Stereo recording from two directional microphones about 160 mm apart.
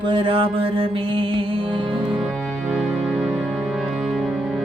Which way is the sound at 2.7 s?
Centre (ahead or behind).